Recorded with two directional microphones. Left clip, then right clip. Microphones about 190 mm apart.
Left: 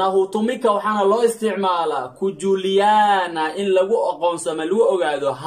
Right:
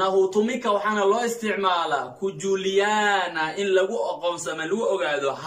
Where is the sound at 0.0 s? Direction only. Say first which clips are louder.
Left 2 dB; 40° left (ahead or behind).